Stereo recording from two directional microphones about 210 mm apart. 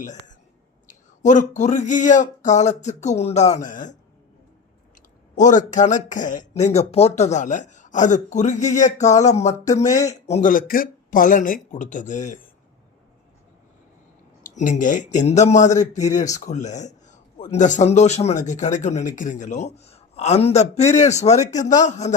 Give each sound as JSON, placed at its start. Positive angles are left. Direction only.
{"t": 0.9, "sound": "speech", "side_deg": 35}
{"t": 5.3, "sound": "speech", "side_deg": 35}
{"t": 14.4, "sound": "speech", "side_deg": 40}